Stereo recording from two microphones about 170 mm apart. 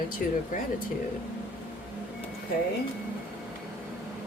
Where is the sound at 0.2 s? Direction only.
55° left (ahead or behind).